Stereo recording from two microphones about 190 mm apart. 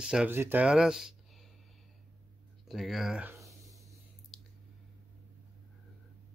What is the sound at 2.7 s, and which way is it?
Speech, centre (ahead or behind).